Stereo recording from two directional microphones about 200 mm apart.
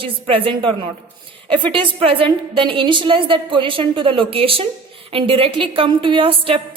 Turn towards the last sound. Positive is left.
turn(degrees=-25)  # may be behind; listen again after turning